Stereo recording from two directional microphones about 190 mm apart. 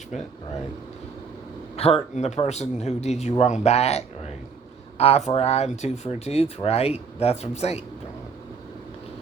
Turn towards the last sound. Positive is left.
turn(degrees=35)  # may be behind; listen again after turning